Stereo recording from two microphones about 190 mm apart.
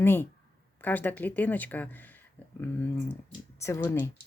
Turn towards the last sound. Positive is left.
turn(degrees=10)  # may be behind; listen again after turning